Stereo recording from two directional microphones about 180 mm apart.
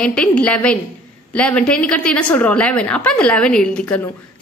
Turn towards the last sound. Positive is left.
turn(degrees=5)  # may be behind; listen again after turning